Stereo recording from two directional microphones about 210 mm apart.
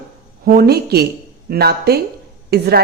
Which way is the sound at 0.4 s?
45° right (ahead or behind).